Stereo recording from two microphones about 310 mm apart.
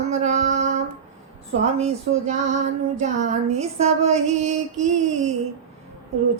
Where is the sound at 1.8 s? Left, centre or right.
Right.